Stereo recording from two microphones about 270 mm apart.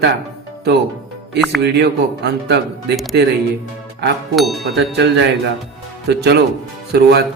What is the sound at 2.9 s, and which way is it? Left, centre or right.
Speech, centre.